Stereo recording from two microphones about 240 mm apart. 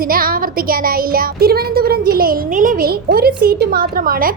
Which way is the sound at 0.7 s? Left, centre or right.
Right.